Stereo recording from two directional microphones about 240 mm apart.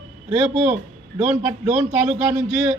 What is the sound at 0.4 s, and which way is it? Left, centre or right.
A man's voice, centre.